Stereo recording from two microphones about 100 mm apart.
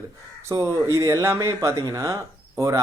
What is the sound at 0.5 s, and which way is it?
Speech, 30° right (ahead or behind).